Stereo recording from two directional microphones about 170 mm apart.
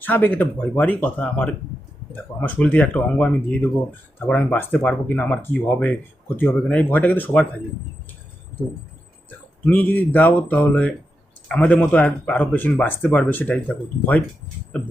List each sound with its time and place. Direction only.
0.0 s speech: 10° left (ahead or behind)
9.6 s speech: 10° left (ahead or behind)